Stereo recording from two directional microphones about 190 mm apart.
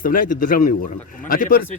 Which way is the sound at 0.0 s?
45° left (ahead or behind).